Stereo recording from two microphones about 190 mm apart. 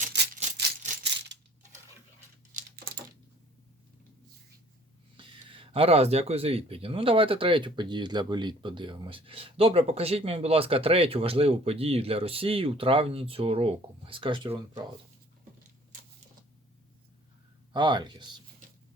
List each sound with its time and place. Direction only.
1.0 s coin: 65° right (ahead or behind)
2.5 s typing: 45° right (ahead or behind)
5.1 s speech: 25° right (ahead or behind)
17.7 s speech: 25° right (ahead or behind)